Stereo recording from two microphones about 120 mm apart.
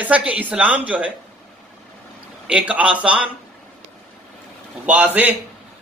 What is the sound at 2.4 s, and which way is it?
Speech, 10° right (ahead or behind).